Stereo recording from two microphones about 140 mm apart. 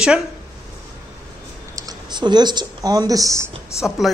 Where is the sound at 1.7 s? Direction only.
30° right (ahead or behind).